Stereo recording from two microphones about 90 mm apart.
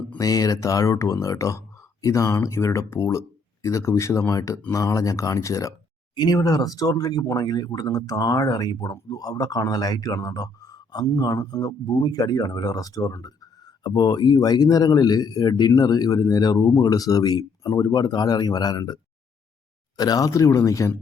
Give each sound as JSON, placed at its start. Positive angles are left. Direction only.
{"t": 0.2, "sound": "speech", "side_deg": 40}
{"t": 20.0, "sound": "speech", "side_deg": 45}